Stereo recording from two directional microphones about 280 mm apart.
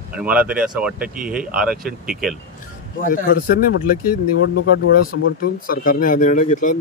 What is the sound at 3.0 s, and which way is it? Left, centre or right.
Speech, left.